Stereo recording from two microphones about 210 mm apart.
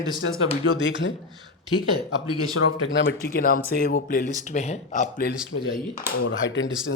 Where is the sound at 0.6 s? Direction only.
65° left (ahead or behind).